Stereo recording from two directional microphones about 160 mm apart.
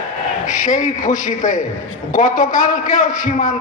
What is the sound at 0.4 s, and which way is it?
A man's voice, 55° left (ahead or behind).